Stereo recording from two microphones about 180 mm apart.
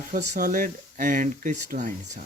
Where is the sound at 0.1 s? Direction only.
50° right (ahead or behind).